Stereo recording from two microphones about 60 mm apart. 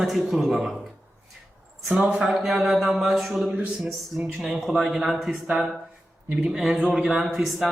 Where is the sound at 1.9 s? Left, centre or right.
Centre.